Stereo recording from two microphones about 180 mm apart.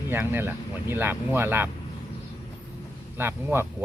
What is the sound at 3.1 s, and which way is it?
Speech, 10° right (ahead or behind).